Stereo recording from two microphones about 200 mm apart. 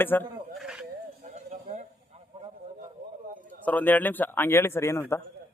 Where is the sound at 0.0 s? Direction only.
10° left (ahead or behind).